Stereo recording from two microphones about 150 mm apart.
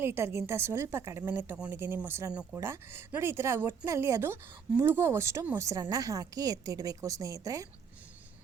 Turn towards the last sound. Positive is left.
turn(degrees=-25)  # may be behind; listen again after turning